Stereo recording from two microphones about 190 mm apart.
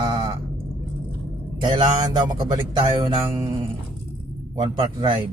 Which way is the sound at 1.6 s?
20° right (ahead or behind).